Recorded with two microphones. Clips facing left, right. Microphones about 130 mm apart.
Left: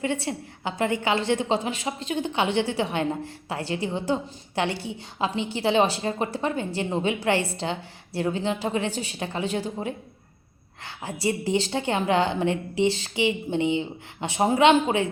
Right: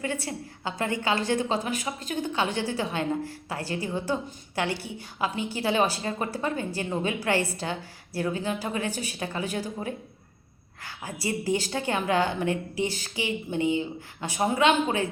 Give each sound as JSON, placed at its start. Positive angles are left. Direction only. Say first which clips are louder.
{"t": 0.0, "sound": "a woman's voice", "louder": "left 4 dB", "side_deg": 25}